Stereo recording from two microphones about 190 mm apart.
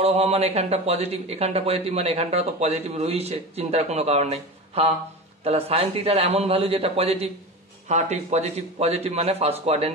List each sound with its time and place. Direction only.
0.0 s a man's voice: 30° right (ahead or behind)